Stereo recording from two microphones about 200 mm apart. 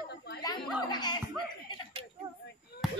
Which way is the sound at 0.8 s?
20° left (ahead or behind).